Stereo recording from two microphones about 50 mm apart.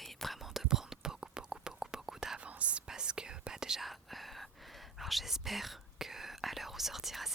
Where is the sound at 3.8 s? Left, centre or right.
Centre.